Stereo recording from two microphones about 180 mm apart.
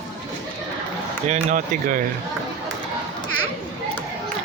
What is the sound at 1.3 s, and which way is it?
Speech, 45° right (ahead or behind).